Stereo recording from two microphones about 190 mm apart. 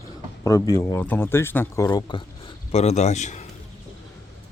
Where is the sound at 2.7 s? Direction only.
35° left (ahead or behind).